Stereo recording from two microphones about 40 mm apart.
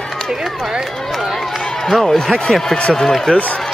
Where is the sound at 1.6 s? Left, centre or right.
Centre.